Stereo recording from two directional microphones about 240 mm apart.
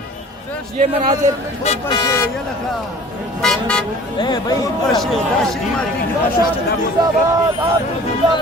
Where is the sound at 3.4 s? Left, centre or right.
Centre.